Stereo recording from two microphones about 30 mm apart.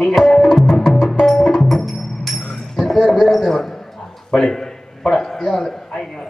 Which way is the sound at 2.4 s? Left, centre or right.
Left.